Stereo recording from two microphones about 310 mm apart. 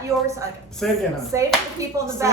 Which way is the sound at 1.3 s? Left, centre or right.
Centre.